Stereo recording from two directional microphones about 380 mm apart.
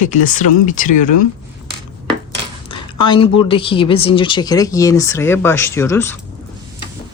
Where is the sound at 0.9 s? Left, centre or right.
Left.